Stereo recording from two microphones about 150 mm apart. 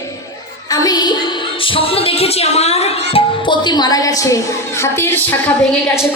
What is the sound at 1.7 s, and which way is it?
Music, 40° left (ahead or behind).